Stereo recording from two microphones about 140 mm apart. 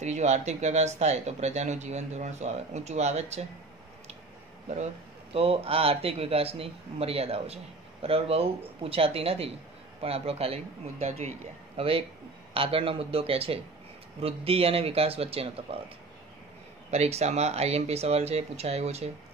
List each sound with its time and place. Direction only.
0.0 s speech: 55° right (ahead or behind)
5.3 s speech: 45° right (ahead or behind)
16.9 s speech: 50° right (ahead or behind)